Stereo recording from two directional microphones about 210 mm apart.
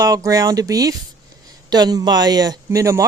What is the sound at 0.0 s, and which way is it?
Speech, 15° right (ahead or behind).